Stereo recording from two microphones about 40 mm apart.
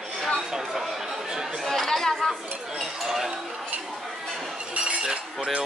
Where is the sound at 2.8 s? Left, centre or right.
Centre.